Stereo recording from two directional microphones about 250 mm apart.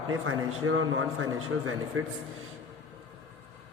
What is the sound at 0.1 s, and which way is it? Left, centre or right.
A man's voice, right.